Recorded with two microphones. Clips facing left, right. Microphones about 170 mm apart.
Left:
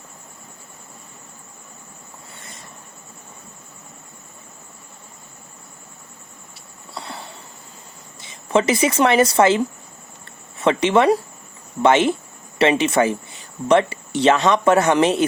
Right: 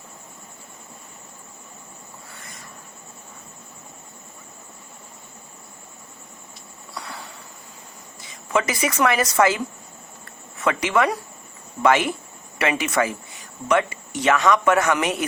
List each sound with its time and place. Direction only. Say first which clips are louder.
2.3 s vehicle: left 1 dB; 25° left (ahead or behind)
6.9 s a sound: left 2 dB; 30° left (ahead or behind)
8.2 s speech: left 5 dB; 25° left (ahead or behind)
10.6 s speech: left 5 dB; 30° left (ahead or behind)